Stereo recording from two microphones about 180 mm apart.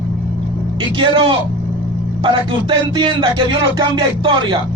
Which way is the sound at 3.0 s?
25° right (ahead or behind).